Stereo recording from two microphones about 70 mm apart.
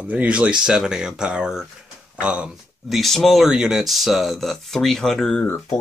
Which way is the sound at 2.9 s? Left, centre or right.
Centre.